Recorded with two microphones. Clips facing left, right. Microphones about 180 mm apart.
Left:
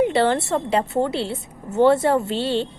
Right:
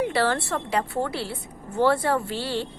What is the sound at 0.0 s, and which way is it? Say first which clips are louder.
A woman's voice: left 5 dB; 25° left (ahead or behind).